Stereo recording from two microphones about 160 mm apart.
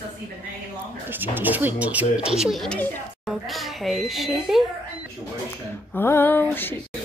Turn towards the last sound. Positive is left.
turn(degrees=10)  # may be behind; listen again after turning